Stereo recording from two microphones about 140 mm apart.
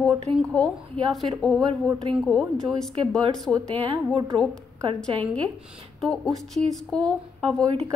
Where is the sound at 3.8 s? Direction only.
35° right (ahead or behind).